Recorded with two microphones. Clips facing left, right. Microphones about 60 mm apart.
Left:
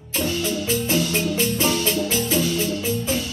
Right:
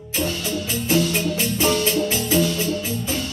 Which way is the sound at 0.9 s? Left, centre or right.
Centre.